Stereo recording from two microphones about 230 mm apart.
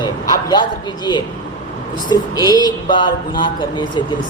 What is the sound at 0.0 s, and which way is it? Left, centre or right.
Speech, centre.